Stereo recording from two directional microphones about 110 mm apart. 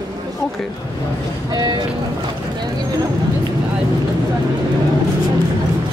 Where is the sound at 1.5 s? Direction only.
40° right (ahead or behind).